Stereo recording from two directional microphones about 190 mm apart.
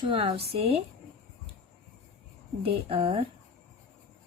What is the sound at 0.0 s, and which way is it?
Speech, 30° right (ahead or behind).